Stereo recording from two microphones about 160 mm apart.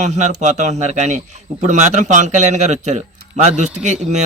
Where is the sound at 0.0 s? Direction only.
45° right (ahead or behind).